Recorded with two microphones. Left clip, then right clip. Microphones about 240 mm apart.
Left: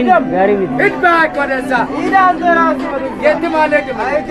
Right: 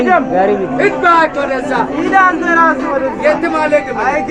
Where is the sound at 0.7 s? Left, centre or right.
Centre.